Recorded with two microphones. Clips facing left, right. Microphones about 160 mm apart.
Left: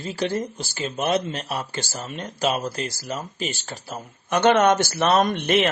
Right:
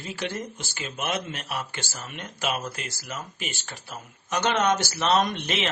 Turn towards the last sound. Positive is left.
turn(degrees=55)  # may be behind; listen again after turning